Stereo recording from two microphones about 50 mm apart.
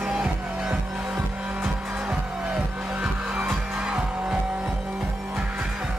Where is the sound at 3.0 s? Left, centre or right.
Right.